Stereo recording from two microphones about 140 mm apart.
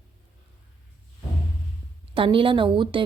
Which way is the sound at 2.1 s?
40° right (ahead or behind).